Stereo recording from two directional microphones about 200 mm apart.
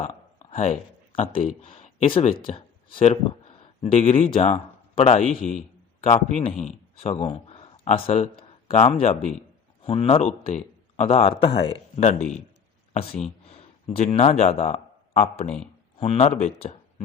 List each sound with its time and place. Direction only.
0.0 s a man's voice: 35° left (ahead or behind)
13.5 s a man's voice: 30° left (ahead or behind)
15.4 s speech: 5° left (ahead or behind)
16.0 s a man's voice: 30° left (ahead or behind)